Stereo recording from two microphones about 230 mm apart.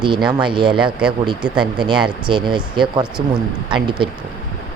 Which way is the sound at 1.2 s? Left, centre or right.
Right.